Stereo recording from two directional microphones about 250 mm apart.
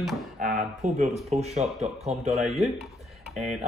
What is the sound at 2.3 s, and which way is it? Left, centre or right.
Speech, centre.